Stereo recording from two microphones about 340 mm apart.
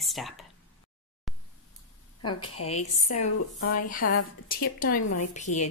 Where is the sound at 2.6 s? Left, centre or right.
Centre.